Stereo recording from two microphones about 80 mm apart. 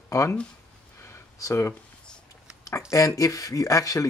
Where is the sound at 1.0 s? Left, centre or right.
Left.